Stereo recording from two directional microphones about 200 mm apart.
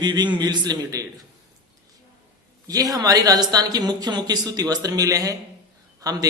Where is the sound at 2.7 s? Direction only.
20° right (ahead or behind).